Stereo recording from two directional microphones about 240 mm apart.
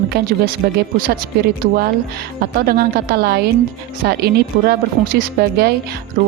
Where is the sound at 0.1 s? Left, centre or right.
Right.